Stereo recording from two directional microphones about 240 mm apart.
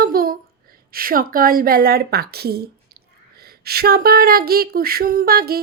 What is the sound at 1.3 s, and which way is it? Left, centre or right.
A woman's voice, right.